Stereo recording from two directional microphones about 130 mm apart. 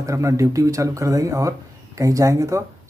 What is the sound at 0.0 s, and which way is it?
Speech, 25° right (ahead or behind).